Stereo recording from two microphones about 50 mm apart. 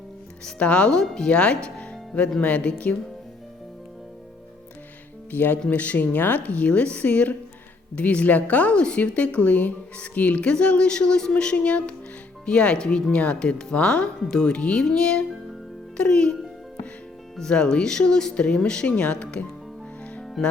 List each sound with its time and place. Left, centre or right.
0.6 s a woman's voice: left
5.3 s a woman's voice: left
20.4 s music: centre